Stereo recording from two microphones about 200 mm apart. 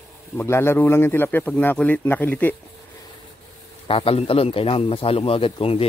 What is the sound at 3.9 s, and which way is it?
Speech, 25° left (ahead or behind).